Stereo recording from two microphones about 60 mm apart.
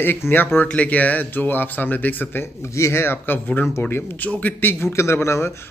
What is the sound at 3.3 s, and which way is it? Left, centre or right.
A man's voice, left.